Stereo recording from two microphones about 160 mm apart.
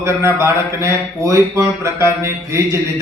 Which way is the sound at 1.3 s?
20° right (ahead or behind).